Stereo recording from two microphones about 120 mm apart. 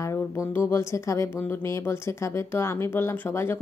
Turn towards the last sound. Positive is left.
turn(degrees=20)  # may be behind; listen again after turning